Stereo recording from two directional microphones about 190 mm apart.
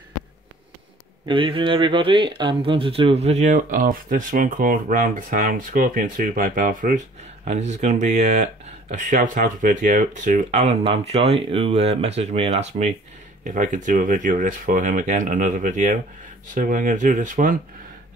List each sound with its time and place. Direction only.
1.2 s speech: 25° right (ahead or behind); by 17.6 s 45° right (ahead or behind)